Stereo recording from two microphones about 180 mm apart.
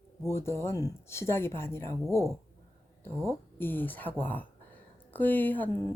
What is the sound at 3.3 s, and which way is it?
Speech, 10° left (ahead or behind).